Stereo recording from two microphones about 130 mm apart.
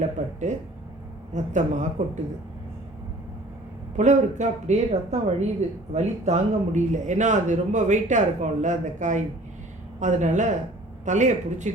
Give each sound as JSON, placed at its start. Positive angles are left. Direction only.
{"t": 0.0, "sound": "speech", "side_deg": -65}
{"t": 3.9, "sound": "speech", "side_deg": -65}